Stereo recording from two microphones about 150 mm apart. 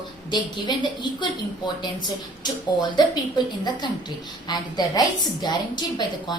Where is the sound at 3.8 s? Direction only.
30° left (ahead or behind).